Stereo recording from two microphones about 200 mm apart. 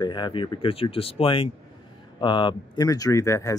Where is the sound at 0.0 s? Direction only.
20° left (ahead or behind).